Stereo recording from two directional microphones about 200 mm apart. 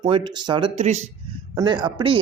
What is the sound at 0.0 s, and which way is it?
Speech, 20° right (ahead or behind).